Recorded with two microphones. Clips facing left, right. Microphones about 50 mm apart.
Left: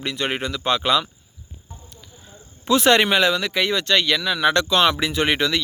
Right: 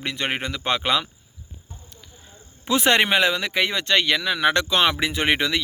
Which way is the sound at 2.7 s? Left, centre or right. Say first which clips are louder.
Left 2 dB; right.